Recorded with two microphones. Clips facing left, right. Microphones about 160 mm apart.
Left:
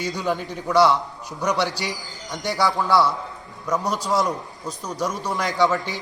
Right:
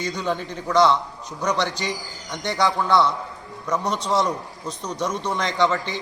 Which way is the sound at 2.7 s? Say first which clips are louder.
Even; centre (ahead or behind).